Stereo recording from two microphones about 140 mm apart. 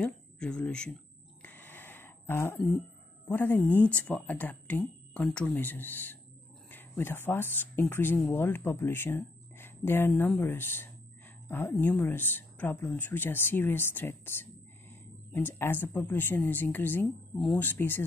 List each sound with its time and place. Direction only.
0.0 s speech: 10° left (ahead or behind)
1.4 s a sound: 15° left (ahead or behind)
3.3 s speech: 15° left (ahead or behind)